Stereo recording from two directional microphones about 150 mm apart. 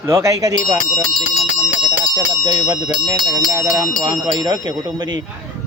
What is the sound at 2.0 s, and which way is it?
Speech, 30° right (ahead or behind).